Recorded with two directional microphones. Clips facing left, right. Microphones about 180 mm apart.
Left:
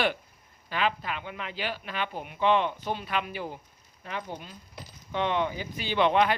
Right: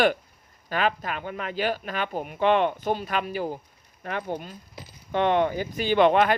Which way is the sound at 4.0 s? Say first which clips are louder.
Right 6 dB; 55° right (ahead or behind).